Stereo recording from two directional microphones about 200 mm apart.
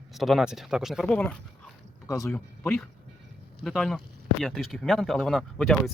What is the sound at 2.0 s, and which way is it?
Speech, 15° left (ahead or behind).